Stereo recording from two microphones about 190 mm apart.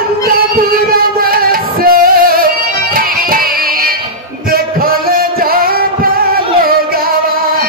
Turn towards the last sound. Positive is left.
turn(degrees=-50)  # may be behind; listen again after turning